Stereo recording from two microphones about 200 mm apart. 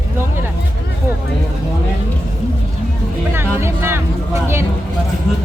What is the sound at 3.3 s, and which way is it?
Music, 10° right (ahead or behind).